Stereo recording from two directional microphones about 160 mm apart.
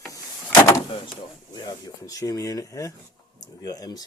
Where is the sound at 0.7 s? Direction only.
30° left (ahead or behind).